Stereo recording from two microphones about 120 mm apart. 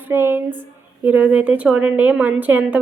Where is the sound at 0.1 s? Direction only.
20° right (ahead or behind).